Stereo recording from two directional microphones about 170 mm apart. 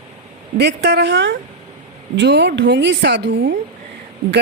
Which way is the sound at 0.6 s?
80° right.